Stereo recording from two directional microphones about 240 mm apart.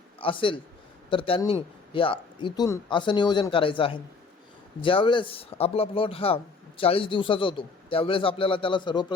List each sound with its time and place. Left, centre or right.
0.2 s a man's voice: left